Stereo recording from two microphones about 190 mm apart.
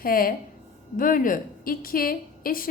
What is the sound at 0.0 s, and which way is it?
A woman's voice, 50° left (ahead or behind).